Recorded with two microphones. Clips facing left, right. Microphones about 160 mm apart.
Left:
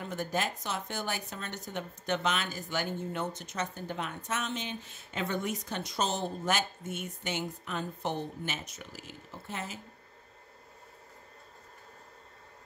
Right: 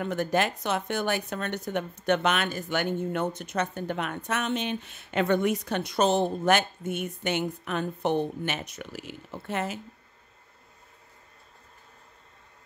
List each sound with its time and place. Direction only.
0.0 s speech: 70° right (ahead or behind)